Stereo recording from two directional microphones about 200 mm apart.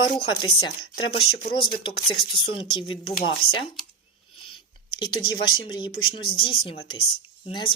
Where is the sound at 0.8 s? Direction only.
50° left (ahead or behind).